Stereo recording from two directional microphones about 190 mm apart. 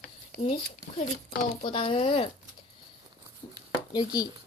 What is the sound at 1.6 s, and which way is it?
Speech, 30° left (ahead or behind).